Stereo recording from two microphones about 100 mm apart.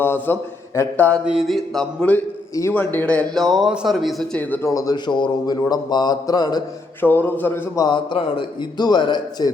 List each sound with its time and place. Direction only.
0.0 s a man's voice: 20° left (ahead or behind)
1.2 s a sound: 5° right (ahead or behind)
2.7 s a man's voice: 20° left (ahead or behind); by 3.7 s centre (ahead or behind)
3.8 s a sound: centre (ahead or behind)
4.4 s a man's voice: 15° left (ahead or behind)
4.7 s speech: 40° left (ahead or behind)
7.0 s music: 20° left (ahead or behind)
7.8 s speech: 50° left (ahead or behind)